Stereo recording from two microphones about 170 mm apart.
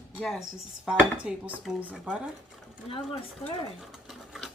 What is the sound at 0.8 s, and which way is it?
Dishes, 5° right (ahead or behind).